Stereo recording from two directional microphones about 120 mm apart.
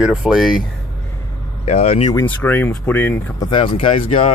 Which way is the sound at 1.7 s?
65° left (ahead or behind).